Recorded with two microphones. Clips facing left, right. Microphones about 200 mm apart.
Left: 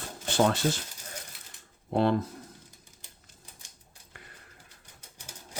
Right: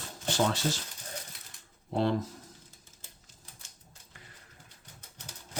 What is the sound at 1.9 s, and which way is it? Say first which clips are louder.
Speech: left 3 dB; 55° left (ahead or behind).